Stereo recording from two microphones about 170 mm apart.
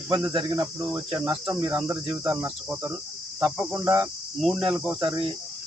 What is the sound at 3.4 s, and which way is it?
Cricket, 5° right (ahead or behind).